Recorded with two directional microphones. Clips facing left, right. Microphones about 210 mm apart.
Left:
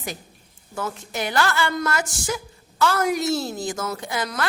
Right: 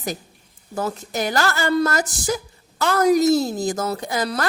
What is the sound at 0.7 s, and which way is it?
A woman's voice, 40° right (ahead or behind).